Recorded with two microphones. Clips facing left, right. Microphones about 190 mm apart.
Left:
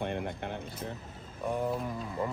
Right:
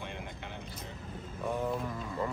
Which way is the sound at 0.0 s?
55° left (ahead or behind).